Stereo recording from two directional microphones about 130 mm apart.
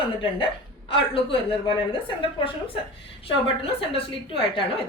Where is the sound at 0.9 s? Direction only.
45° left (ahead or behind).